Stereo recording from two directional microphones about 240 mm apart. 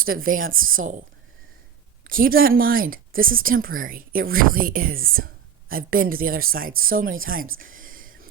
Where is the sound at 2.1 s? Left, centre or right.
Right.